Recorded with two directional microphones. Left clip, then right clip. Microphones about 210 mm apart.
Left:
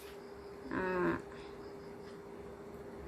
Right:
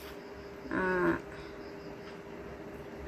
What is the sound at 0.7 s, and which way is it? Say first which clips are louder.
Livestock: right 5 dB; 10° left (ahead or behind).